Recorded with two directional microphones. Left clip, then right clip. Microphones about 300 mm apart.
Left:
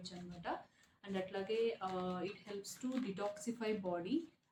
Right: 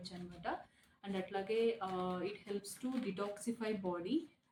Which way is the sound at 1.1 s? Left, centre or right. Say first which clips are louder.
Right 1 dB; centre.